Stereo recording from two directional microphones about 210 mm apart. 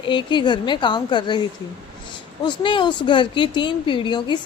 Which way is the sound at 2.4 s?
20° left (ahead or behind).